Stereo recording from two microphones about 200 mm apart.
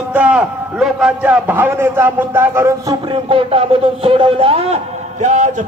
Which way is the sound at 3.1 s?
25° right (ahead or behind).